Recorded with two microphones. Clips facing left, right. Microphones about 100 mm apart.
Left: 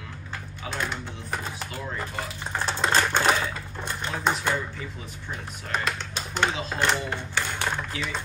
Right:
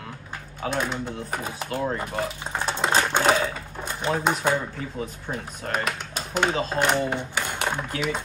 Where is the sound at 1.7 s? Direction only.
50° right (ahead or behind).